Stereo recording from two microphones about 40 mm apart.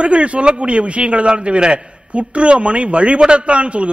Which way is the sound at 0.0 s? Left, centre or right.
Right.